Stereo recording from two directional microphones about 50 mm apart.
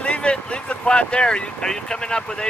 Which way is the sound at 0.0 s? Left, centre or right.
Left.